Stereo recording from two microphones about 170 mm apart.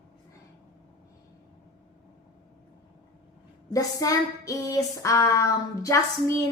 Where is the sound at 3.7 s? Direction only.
20° left (ahead or behind).